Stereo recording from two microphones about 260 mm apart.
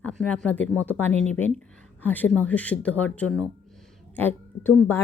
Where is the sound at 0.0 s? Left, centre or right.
Centre.